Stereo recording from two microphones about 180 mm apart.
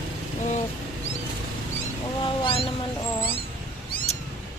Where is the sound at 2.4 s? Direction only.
30° left (ahead or behind).